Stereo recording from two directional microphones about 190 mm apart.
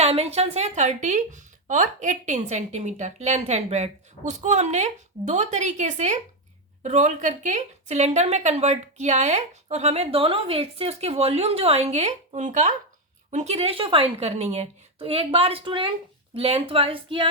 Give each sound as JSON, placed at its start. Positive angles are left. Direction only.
{"t": 0.0, "sound": "a woman's voice", "side_deg": -35}